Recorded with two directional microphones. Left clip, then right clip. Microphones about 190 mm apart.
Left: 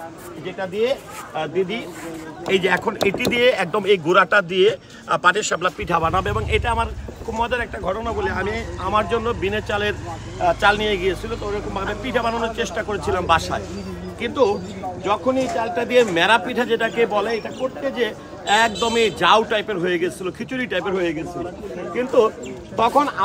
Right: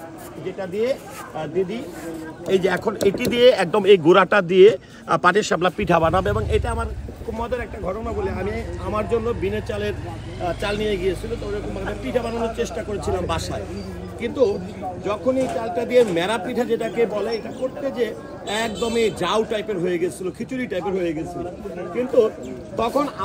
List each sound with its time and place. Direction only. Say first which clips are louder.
0.6 s a man's voice: left 2 dB; centre (ahead or behind)
2.7 s speech: left 1 dB; 25° right (ahead or behind)
7.3 s a man's voice: left 5 dB; centre (ahead or behind)